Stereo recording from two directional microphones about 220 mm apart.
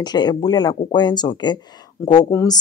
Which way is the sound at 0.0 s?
20° left (ahead or behind).